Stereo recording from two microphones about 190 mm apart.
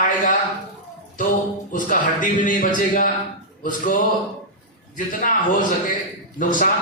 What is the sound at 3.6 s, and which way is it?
A man's voice, 45° left (ahead or behind).